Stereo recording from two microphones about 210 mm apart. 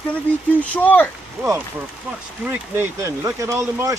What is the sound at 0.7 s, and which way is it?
Speech, 10° left (ahead or behind).